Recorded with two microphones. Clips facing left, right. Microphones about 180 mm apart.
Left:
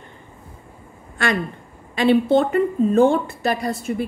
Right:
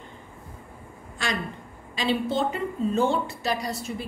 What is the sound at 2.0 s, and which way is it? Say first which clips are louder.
A woman's voice: left 9 dB; 60° left (ahead or behind).